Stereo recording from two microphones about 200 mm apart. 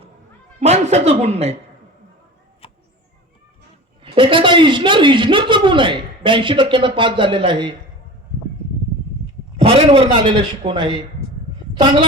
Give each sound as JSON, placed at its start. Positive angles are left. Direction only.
{"t": 0.6, "sound": "speech", "side_deg": -35}
{"t": 2.6, "sound": "a sound", "side_deg": 30}
{"t": 4.0, "sound": "speech", "side_deg": -25}
{"t": 10.0, "sound": "speech", "side_deg": -25}